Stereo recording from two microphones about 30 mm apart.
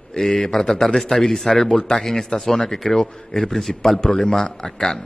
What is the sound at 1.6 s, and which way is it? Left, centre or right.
A man's voice, left.